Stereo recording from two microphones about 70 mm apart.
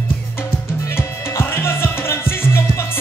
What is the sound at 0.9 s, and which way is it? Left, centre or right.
Music, left.